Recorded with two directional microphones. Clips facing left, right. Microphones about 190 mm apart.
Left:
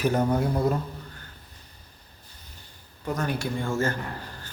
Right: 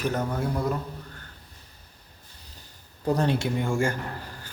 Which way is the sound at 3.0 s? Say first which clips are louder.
Right 4 dB; 30° right (ahead or behind).